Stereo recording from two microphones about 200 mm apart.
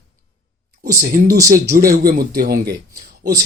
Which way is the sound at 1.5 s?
45° right (ahead or behind).